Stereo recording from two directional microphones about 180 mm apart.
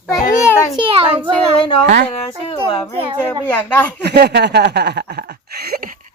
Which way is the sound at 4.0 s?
65° right (ahead or behind).